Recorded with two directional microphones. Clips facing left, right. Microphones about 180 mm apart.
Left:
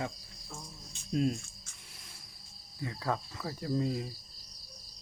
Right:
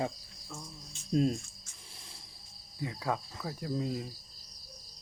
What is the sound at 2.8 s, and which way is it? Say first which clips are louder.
Cricket: even; 15° right (ahead or behind).